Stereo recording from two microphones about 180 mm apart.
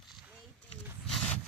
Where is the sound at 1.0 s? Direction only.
5° left (ahead or behind).